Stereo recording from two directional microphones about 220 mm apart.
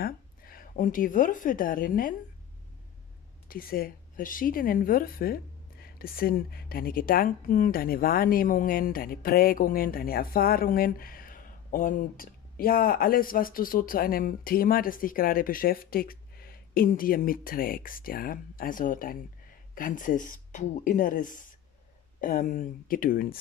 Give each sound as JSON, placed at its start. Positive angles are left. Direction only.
{"t": 0.0, "sound": "speech", "side_deg": 40}
{"t": 3.4, "sound": "a woman's voice", "side_deg": 40}